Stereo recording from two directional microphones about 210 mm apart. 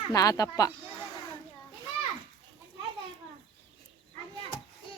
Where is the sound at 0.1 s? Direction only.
15° left (ahead or behind).